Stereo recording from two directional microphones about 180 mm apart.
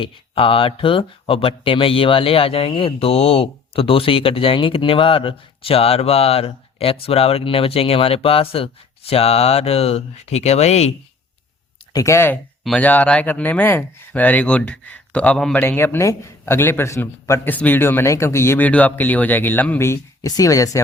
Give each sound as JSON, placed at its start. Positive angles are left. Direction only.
{"t": 0.0, "sound": "speech", "side_deg": 30}
{"t": 11.9, "sound": "speech", "side_deg": 15}